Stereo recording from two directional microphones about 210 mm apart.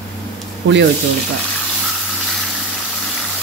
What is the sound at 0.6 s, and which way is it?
Speech, 60° right (ahead or behind).